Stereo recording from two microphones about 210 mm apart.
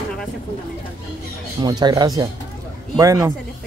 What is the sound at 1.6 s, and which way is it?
A man's voice, 20° right (ahead or behind).